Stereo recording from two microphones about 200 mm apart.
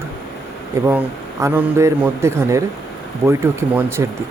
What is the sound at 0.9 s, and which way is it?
A man's voice, 10° right (ahead or behind).